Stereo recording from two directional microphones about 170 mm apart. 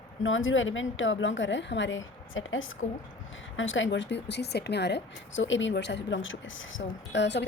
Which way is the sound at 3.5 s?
90° left.